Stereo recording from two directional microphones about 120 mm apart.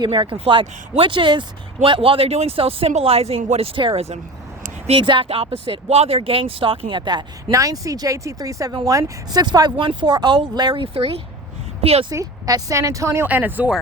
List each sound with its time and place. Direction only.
0.0 s speech: 40° right (ahead or behind); by 12.0 s 55° right (ahead or behind)
12.1 s a woman's voice: 30° right (ahead or behind)
13.2 s speech: 15° right (ahead or behind)